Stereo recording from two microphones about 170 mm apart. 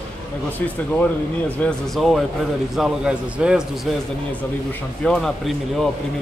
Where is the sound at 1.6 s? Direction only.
Centre (ahead or behind).